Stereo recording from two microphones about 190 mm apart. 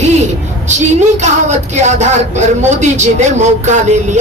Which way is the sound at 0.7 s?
40° right (ahead or behind).